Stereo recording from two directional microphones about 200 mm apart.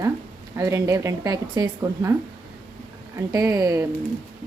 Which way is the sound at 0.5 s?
15° right (ahead or behind).